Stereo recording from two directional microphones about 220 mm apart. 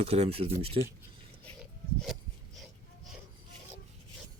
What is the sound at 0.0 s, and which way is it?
Speech, 25° right (ahead or behind).